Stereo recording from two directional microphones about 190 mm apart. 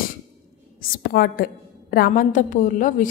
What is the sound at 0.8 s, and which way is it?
A woman's voice, 50° left (ahead or behind).